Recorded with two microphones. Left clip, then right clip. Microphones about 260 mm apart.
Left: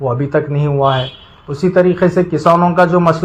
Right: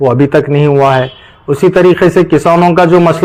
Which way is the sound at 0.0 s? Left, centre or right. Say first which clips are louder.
Right 7 dB; right.